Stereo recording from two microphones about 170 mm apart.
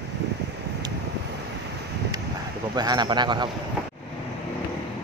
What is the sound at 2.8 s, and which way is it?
Speech, 25° right (ahead or behind).